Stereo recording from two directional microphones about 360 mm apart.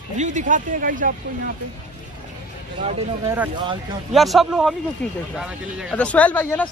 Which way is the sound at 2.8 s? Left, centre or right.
Centre.